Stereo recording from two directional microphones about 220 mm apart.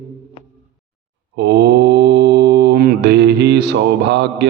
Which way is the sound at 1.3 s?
50° right (ahead or behind).